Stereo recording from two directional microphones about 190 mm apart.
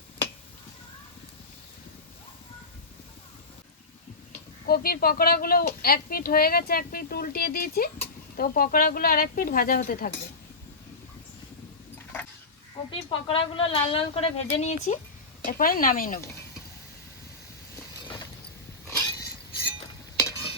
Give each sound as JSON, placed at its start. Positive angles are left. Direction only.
{"t": 4.6, "sound": "a woman's voice", "side_deg": 50}
{"t": 12.9, "sound": "a woman's voice", "side_deg": 30}
{"t": 15.4, "sound": "a woman's voice", "side_deg": 50}
{"t": 18.9, "sound": "a sound", "side_deg": 15}